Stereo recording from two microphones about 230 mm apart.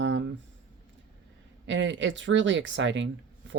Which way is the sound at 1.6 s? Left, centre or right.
Right.